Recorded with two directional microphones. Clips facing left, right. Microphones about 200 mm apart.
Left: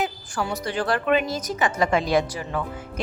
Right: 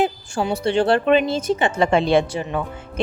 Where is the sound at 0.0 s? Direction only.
25° right (ahead or behind).